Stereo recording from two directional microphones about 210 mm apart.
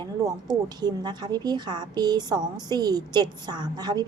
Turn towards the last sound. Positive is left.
turn(degrees=-20)  # may be behind; listen again after turning